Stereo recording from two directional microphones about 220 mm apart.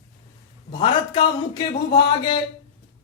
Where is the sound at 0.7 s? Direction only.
20° left (ahead or behind).